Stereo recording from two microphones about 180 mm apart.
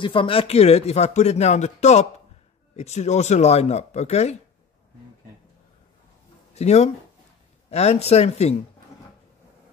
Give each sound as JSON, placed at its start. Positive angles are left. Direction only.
{"t": 0.0, "sound": "speech", "side_deg": 30}
{"t": 6.5, "sound": "speech", "side_deg": 35}